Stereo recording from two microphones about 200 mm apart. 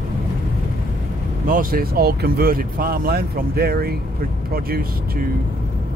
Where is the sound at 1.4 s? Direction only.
45° right (ahead or behind).